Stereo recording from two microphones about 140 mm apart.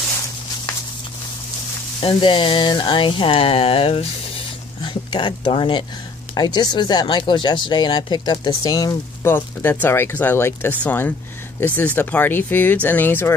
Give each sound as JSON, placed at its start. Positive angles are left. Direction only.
{"t": 2.0, "sound": "speech", "side_deg": 40}
{"t": 4.8, "sound": "speech", "side_deg": 35}
{"t": 9.2, "sound": "speech", "side_deg": 15}